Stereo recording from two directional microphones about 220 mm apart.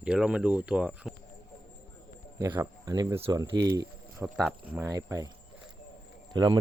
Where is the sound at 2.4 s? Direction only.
10° right (ahead or behind).